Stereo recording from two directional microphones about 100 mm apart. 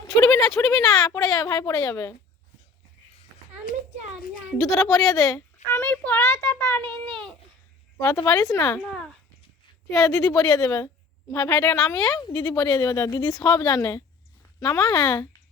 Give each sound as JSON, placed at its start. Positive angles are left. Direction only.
{"t": 0.1, "sound": "speech", "side_deg": 35}
{"t": 4.8, "sound": "a child's voice", "side_deg": 30}
{"t": 7.9, "sound": "speech", "side_deg": 35}
{"t": 9.9, "sound": "speech", "side_deg": 35}
{"t": 11.7, "sound": "a child's voice", "side_deg": 30}
{"t": 12.0, "sound": "speech", "side_deg": 40}